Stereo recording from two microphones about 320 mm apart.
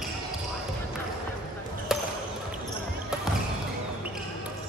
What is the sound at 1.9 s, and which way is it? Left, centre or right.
Basketball bounce, centre.